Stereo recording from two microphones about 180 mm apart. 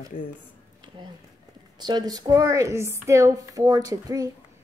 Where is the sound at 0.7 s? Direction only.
25° right (ahead or behind).